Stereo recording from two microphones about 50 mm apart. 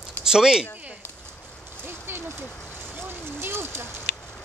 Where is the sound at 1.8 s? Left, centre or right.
Right.